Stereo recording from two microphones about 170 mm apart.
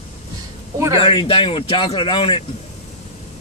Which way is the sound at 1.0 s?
30° left (ahead or behind).